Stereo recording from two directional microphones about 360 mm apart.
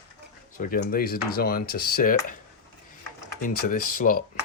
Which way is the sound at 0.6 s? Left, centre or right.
Left.